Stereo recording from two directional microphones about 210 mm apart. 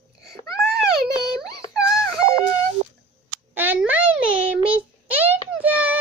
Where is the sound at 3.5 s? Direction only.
10° right (ahead or behind).